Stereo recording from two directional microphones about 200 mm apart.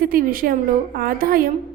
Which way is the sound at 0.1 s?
45° right (ahead or behind).